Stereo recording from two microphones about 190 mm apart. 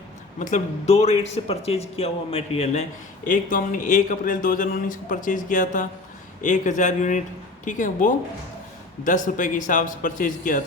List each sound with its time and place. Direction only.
0.3 s speech: 40° left (ahead or behind)
3.2 s a man's voice: 45° left (ahead or behind)